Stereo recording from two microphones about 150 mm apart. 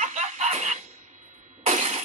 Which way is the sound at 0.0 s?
50° right (ahead or behind).